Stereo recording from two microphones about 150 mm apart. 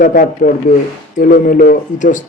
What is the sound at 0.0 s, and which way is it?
A man's voice, 65° left (ahead or behind).